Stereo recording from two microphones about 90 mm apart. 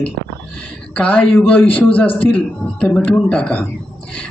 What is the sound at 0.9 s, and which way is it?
Speech, 15° left (ahead or behind).